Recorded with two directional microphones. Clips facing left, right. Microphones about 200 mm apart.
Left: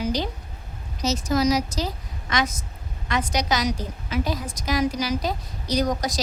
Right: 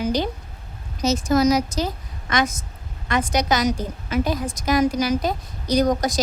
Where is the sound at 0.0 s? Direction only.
50° right (ahead or behind).